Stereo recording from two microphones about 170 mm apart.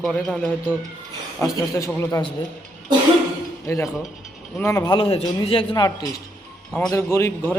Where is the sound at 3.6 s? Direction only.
15° left (ahead or behind).